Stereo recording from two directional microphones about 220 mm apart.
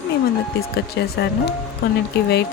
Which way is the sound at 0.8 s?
50° left (ahead or behind).